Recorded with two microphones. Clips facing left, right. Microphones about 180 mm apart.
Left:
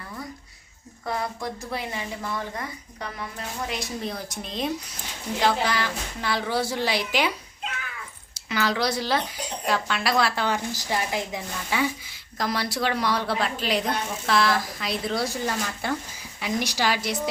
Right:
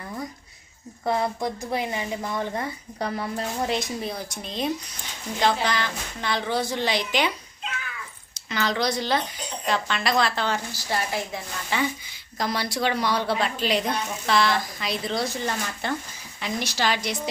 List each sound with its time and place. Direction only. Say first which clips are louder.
1.0 s speech: right 5 dB; 25° right (ahead or behind)
3.0 s a woman's voice: right 7 dB; 35° right (ahead or behind)
4.0 s a woman's voice: even; centre (ahead or behind)
8.4 s a woman's voice: even; 5° left (ahead or behind)